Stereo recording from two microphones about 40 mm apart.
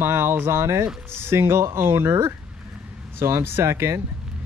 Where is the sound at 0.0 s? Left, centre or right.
Right.